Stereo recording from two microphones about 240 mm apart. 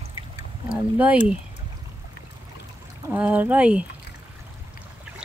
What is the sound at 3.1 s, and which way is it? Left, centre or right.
Speech, centre.